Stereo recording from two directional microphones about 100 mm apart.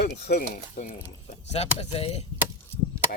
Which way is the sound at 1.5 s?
90° left.